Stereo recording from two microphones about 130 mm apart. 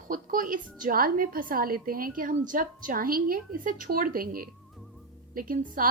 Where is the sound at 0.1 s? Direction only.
90° right.